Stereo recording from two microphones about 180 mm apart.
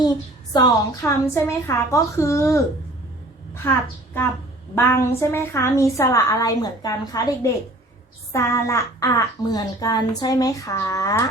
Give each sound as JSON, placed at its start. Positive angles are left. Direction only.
{"t": 0.5, "sound": "a woman's voice", "side_deg": 20}